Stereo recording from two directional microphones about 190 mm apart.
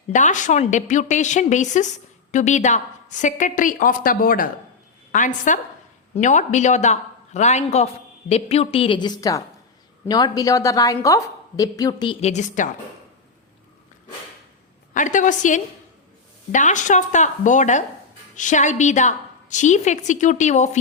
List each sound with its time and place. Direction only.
0.1 s a woman's voice: 40° left (ahead or behind); by 12.1 s 20° left (ahead or behind)
12.2 s a woman's voice: 40° left (ahead or behind)
14.9 s a woman's voice: 40° left (ahead or behind)